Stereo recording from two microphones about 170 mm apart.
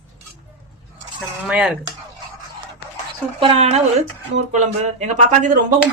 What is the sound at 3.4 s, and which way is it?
Speech, 35° right (ahead or behind).